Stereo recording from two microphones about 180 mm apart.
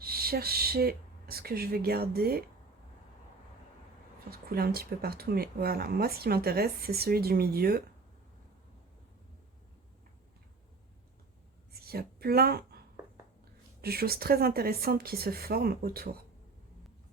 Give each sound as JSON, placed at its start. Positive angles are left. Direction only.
{"t": 0.0, "sound": "speech", "side_deg": -55}
{"t": 4.3, "sound": "speech", "side_deg": -60}
{"t": 11.7, "sound": "a woman's voice", "side_deg": -60}
{"t": 13.8, "sound": "speech", "side_deg": -60}